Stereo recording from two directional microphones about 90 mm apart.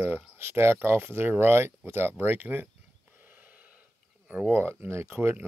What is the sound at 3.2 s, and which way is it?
Gasp, 20° right (ahead or behind).